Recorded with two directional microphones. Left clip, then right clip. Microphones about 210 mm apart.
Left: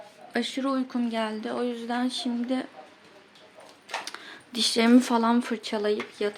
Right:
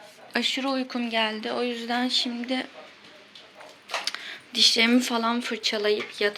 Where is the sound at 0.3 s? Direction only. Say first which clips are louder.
Right 2 dB; 10° left (ahead or behind).